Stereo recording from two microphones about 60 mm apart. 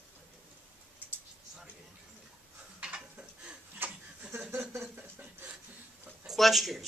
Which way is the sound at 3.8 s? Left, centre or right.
Right.